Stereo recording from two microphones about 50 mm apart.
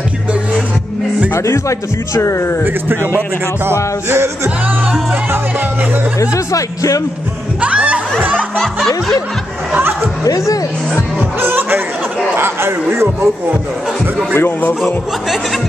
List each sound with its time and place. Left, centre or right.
1.3 s a man's voice: left
2.6 s speech: right
7.6 s a sound: right
8.7 s snicker: centre
11.4 s a sound: right
12.9 s speech: right
14.3 s a man's voice: left